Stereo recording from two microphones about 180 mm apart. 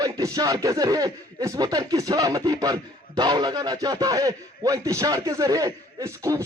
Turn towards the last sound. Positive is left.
turn(degrees=-20)  # may be behind; listen again after turning